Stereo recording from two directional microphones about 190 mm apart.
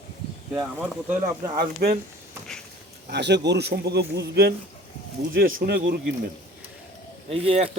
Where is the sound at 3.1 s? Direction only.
65° right (ahead or behind).